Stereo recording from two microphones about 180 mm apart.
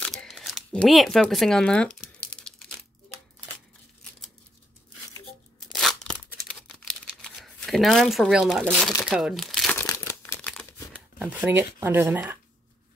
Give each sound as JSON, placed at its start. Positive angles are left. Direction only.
{"t": 0.0, "sound": "speech", "side_deg": 5}
{"t": 2.0, "sound": "crumpling", "side_deg": 5}
{"t": 5.7, "sound": "tearing", "side_deg": 0}
{"t": 6.4, "sound": "crumpling", "side_deg": 5}
{"t": 9.0, "sound": "speech", "side_deg": 0}
{"t": 9.8, "sound": "crumpling", "side_deg": 15}
{"t": 10.4, "sound": "crumpling", "side_deg": 0}
{"t": 11.1, "sound": "speech", "side_deg": -10}